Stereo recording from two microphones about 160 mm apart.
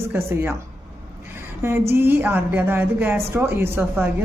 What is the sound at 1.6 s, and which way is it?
Speech, 15° right (ahead or behind).